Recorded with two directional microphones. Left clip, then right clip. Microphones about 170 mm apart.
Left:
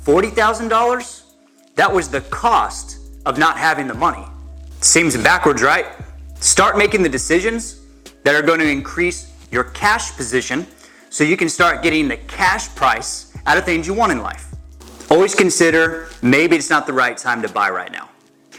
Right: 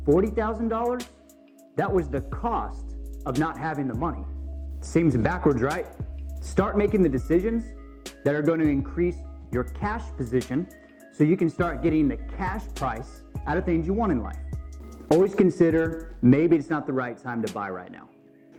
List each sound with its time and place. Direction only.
0.0 s speech: 10° left (ahead or behind)